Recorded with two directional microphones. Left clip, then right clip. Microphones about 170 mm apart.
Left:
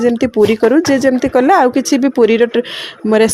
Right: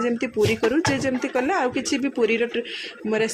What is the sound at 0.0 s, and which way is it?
Speech, 40° left (ahead or behind).